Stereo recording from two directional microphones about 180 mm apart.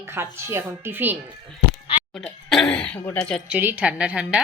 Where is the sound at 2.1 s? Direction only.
Centre (ahead or behind).